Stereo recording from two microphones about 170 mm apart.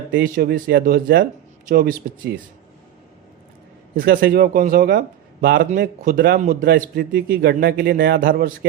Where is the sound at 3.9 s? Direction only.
60° right (ahead or behind); by 8.2 s 80° right.